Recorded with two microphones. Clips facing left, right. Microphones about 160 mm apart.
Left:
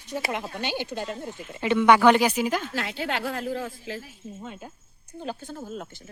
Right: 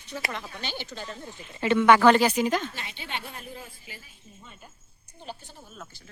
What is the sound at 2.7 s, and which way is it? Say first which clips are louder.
A woman's voice: left 9 dB; 90° left.